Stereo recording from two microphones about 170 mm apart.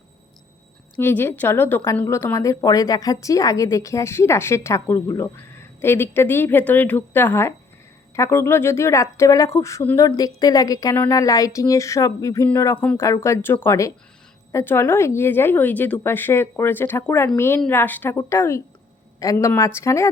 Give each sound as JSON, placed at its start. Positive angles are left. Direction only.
{"t": 0.9, "sound": "a woman's voice", "side_deg": 15}